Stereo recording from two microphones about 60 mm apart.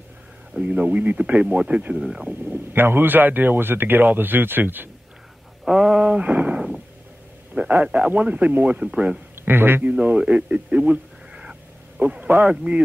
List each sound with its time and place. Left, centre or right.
0.6 s a man's voice: right
2.0 s speech: centre
2.2 s a man's voice: right
5.7 s a man's voice: centre
8.8 s speech: centre
9.3 s a man's voice: right
9.8 s a man's voice: right